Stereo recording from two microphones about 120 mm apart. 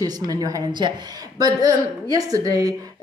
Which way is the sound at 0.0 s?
35° right (ahead or behind).